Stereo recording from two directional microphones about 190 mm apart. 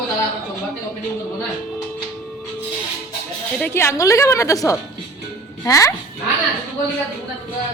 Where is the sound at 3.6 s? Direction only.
15° left (ahead or behind).